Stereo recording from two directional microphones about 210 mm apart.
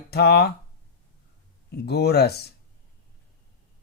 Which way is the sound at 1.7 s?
50° left (ahead or behind).